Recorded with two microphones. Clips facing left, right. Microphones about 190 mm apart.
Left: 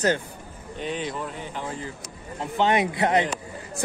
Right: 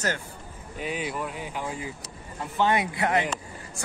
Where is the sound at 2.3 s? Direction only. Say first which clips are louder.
Left 2 dB; 20° left (ahead or behind).